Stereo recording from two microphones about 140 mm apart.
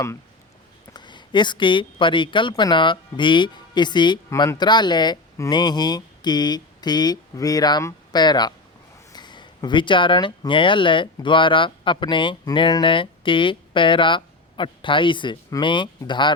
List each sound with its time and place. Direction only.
0.9 s speech: 35° left (ahead or behind)